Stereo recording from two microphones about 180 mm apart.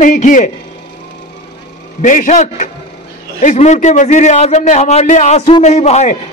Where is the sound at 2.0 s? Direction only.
45° left (ahead or behind).